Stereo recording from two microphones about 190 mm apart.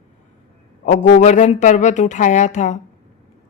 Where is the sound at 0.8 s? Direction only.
40° left (ahead or behind).